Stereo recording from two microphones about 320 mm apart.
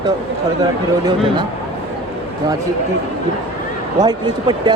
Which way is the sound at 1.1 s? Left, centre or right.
Centre.